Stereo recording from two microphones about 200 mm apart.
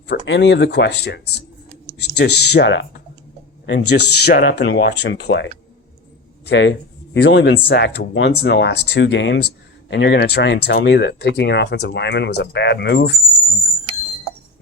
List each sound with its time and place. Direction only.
0.3 s speech: 60° left (ahead or behind)
6.5 s speech: 65° left (ahead or behind)